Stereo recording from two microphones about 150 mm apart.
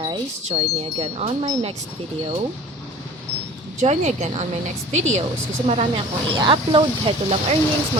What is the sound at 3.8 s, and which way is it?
Wind chime, 50° right (ahead or behind).